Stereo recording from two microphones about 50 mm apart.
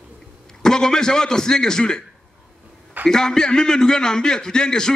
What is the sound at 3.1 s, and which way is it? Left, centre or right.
A man's voice, centre.